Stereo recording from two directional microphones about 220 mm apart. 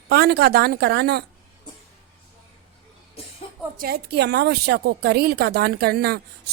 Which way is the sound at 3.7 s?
45° right (ahead or behind).